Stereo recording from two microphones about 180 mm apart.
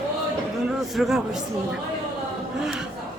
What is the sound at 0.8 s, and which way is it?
Speech, centre (ahead or behind).